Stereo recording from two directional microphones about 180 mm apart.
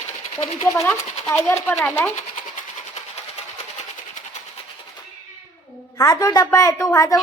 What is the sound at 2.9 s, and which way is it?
Sewing machine, 40° left (ahead or behind).